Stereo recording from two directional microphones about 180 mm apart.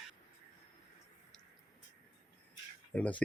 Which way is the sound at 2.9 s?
10° left (ahead or behind).